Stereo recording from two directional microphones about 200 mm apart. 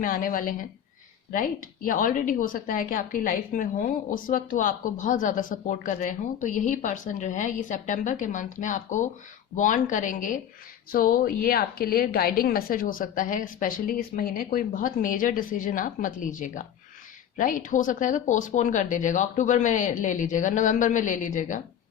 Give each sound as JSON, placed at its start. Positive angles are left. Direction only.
{"t": 0.0, "sound": "a woman's voice", "side_deg": 45}